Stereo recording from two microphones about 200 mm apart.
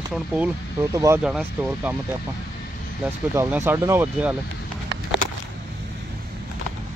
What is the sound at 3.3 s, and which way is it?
Speech, 10° right (ahead or behind).